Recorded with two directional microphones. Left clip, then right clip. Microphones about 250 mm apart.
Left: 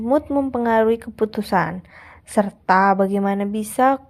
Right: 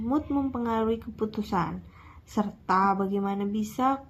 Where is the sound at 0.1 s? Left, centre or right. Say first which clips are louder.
Left 10 dB; left.